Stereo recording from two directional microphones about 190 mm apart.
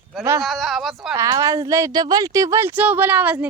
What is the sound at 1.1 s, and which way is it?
A woman's voice, 15° right (ahead or behind).